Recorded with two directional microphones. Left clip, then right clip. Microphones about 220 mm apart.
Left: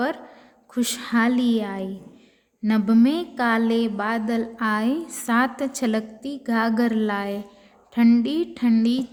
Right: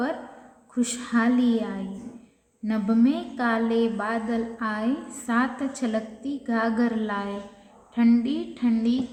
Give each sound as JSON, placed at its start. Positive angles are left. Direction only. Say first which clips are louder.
{"t": 0.7, "sound": "a woman's voice", "louder": "left 2 dB", "side_deg": 40}